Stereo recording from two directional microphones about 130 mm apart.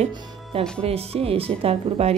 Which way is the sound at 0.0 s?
45° right (ahead or behind).